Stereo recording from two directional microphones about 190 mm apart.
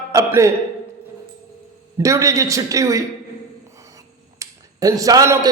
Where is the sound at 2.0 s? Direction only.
15° right (ahead or behind).